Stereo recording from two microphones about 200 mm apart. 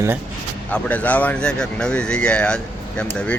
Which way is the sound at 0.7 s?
10° left (ahead or behind).